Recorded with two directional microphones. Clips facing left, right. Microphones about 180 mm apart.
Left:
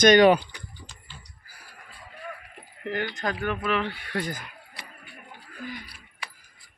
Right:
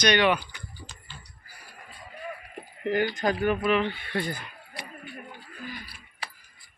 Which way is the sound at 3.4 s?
10° right (ahead or behind).